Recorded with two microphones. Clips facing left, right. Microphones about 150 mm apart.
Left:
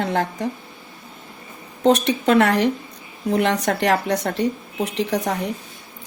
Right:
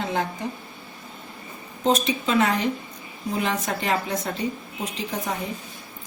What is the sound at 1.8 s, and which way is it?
A woman's voice, 70° left (ahead or behind).